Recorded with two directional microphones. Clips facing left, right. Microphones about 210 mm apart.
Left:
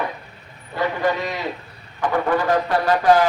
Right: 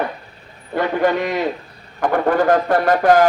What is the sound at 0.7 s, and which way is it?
A man's voice, 50° right (ahead or behind).